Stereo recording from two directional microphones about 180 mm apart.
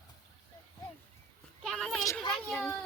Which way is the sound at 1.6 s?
Centre (ahead or behind).